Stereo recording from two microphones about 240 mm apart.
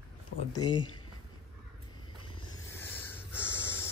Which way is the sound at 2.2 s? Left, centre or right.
Centre.